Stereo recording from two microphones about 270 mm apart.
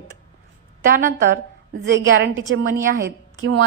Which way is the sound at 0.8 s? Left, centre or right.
Right.